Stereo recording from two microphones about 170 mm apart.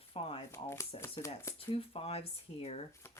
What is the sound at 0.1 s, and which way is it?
Speech, 35° left (ahead or behind).